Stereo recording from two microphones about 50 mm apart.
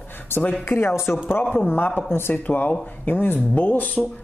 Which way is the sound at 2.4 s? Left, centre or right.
Left.